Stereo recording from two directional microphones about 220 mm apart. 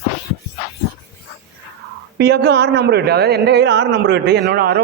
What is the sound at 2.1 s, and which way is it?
Speech, 50° right (ahead or behind).